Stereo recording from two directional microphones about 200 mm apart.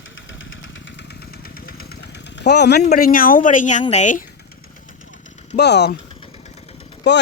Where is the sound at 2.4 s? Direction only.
55° left (ahead or behind).